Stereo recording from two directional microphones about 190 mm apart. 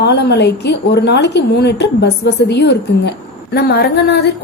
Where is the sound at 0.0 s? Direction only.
65° left (ahead or behind).